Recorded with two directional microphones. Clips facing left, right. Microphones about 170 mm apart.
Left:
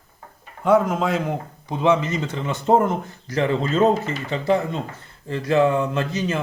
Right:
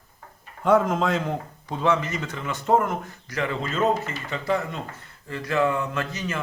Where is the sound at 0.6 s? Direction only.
5° left (ahead or behind).